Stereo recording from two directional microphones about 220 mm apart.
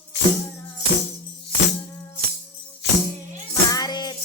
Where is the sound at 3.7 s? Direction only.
20° left (ahead or behind).